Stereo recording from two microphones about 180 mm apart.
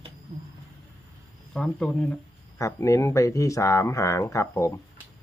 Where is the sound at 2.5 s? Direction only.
15° left (ahead or behind).